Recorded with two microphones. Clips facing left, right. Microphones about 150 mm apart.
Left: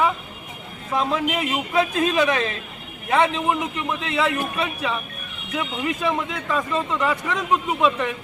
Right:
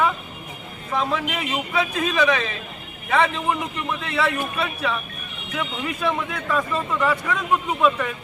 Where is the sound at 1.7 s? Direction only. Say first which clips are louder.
Left 4 dB; 30° left (ahead or behind).